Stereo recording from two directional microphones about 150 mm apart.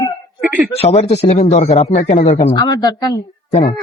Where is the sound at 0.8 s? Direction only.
45° left (ahead or behind).